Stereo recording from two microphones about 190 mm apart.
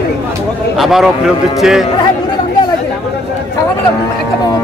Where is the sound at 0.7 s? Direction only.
Centre (ahead or behind).